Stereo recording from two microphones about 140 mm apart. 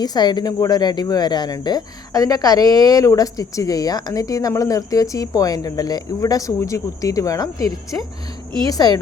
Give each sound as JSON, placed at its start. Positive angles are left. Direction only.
{"t": 0.0, "sound": "speech", "side_deg": 30}